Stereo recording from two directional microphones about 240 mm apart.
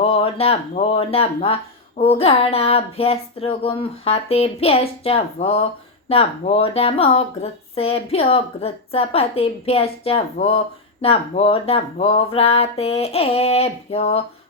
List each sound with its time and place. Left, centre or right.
0.0 s speech: left